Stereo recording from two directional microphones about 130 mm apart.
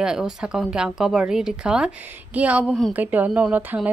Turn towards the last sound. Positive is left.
turn(degrees=-15)  # may be behind; listen again after turning